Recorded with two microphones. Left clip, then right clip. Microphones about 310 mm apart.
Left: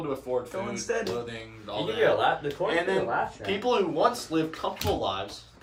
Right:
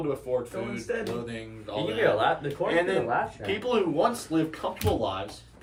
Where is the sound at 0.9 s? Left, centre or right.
Left.